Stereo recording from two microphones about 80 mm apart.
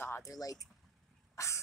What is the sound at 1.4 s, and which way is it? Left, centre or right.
Dog, left.